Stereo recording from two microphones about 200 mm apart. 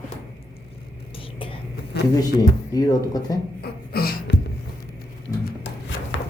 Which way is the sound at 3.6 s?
50° left (ahead or behind).